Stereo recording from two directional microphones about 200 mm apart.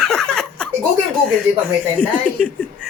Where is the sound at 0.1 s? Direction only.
Centre (ahead or behind).